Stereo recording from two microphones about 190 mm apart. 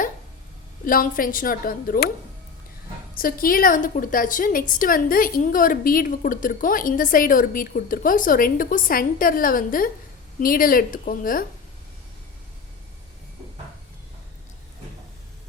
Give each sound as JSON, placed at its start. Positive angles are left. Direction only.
{"t": 0.9, "sound": "a woman's voice", "side_deg": 45}
{"t": 3.2, "sound": "a woman's voice", "side_deg": 50}